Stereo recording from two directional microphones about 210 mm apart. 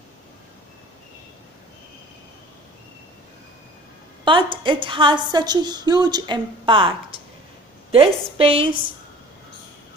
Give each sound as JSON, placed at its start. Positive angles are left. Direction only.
{"t": 4.2, "sound": "a woman's voice", "side_deg": -25}